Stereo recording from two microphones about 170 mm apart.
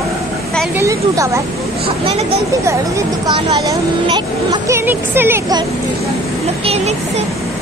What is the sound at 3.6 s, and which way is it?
Speech, 20° right (ahead or behind).